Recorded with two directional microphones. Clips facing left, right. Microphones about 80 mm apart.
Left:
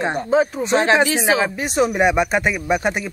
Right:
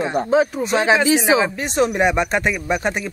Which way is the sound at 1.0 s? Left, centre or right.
Centre.